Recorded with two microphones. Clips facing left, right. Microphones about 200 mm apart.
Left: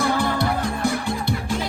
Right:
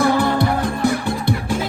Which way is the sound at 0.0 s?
55° right (ahead or behind).